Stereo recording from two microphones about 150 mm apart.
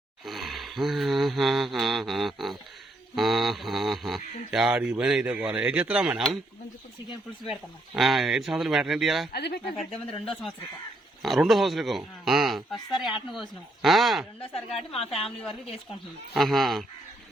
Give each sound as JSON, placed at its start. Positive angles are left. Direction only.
{"t": 0.3, "sound": "a sound", "side_deg": 0}
{"t": 7.5, "sound": "speech", "side_deg": 0}
{"t": 9.3, "sound": "speech", "side_deg": 90}
{"t": 9.7, "sound": "speech", "side_deg": 0}
{"t": 14.7, "sound": "a woman's voice", "side_deg": 40}
{"t": 15.4, "sound": "speech", "side_deg": 5}